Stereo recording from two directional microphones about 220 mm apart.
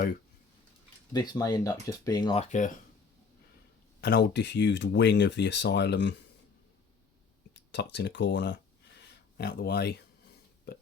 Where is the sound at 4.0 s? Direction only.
50° left (ahead or behind).